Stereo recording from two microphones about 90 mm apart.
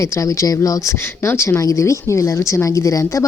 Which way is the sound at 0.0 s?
35° left (ahead or behind).